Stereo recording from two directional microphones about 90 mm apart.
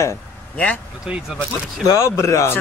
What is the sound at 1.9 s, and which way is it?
Speech, 35° left (ahead or behind).